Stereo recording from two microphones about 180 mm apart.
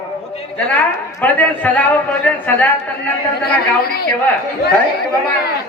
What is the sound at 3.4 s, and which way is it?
Speech, 60° left (ahead or behind).